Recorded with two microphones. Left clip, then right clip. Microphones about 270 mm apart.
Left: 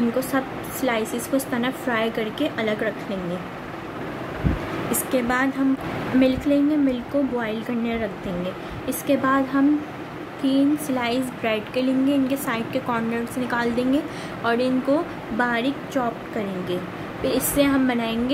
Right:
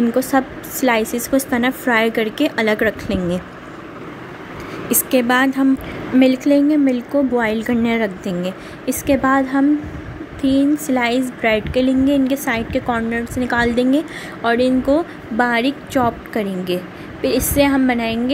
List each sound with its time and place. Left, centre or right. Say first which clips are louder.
0.3 s a woman's voice: right 7 dB; right
5.1 s a woman's voice: right 7 dB; right